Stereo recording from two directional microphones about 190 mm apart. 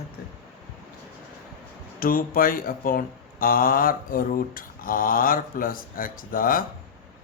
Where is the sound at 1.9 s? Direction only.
50° left (ahead or behind).